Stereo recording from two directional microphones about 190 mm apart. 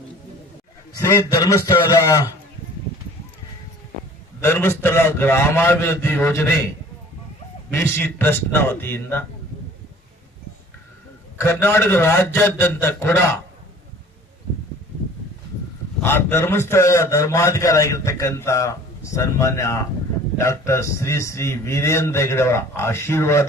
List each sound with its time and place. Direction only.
0.9 s a man's voice: 15° left (ahead or behind)
4.4 s a man's voice: 10° left (ahead or behind)
7.7 s a man's voice: 10° left (ahead or behind)
11.3 s a man's voice: 10° left (ahead or behind)
16.0 s a man's voice: 10° left (ahead or behind)